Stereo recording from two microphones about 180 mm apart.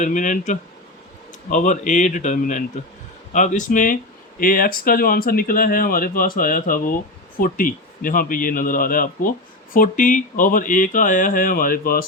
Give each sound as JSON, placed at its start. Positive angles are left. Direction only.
{"t": 0.0, "sound": "speech", "side_deg": 45}